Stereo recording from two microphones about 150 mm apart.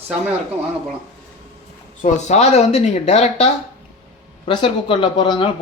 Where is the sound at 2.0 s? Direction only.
55° left (ahead or behind).